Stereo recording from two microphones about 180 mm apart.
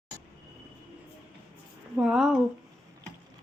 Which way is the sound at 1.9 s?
5° right (ahead or behind).